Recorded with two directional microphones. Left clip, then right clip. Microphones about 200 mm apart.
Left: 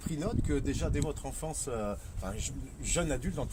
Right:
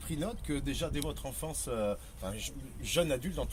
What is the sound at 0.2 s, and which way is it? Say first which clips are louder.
Speech: left 3 dB; 15° left (ahead or behind).